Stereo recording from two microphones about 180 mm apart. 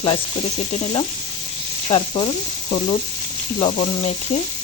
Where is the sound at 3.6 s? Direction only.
35° left (ahead or behind).